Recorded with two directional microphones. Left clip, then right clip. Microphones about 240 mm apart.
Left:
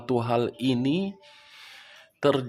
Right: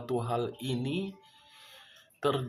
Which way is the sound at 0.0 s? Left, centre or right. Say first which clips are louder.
Left 7 dB; left.